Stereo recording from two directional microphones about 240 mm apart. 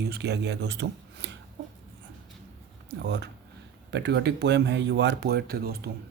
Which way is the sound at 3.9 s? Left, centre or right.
Right.